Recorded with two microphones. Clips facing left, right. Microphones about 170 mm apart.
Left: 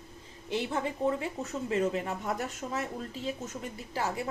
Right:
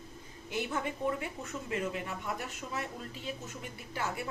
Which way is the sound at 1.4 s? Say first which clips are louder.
Left 6 dB; 40° left (ahead or behind).